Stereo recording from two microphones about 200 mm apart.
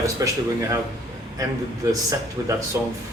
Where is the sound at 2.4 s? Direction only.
15° right (ahead or behind).